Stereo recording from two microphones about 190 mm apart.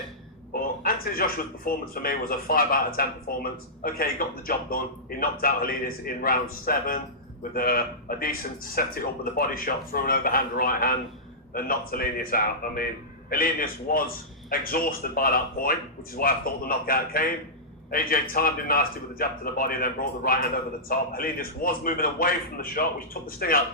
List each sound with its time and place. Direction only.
0.5 s a man's voice: 50° left (ahead or behind)